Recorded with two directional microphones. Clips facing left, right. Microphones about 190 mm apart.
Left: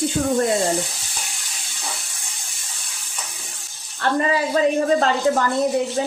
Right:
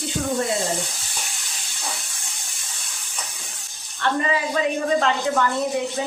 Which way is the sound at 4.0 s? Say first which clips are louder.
Left 3 dB; 40° left (ahead or behind).